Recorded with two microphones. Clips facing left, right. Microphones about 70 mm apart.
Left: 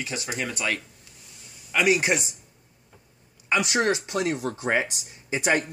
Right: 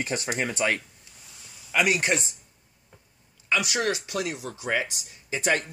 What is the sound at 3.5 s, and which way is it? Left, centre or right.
Speech, left.